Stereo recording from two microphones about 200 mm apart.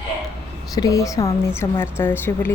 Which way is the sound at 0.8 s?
15° left (ahead or behind).